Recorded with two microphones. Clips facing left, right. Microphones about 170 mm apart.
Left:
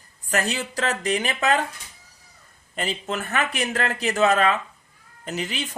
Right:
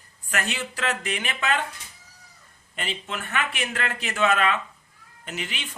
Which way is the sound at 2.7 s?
40° left (ahead or behind).